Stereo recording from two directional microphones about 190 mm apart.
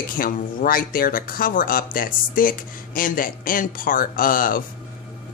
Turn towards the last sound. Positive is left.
turn(degrees=45)  # may be behind; listen again after turning